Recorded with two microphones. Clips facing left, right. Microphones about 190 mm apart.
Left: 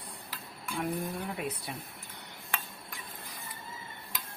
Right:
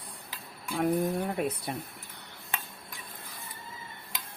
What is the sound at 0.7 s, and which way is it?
Speech, 50° right (ahead or behind).